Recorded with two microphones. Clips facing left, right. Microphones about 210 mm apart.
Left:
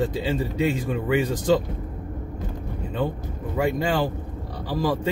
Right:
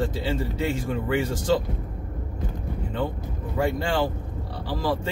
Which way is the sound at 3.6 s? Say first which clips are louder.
Left 1 dB; 15° left (ahead or behind).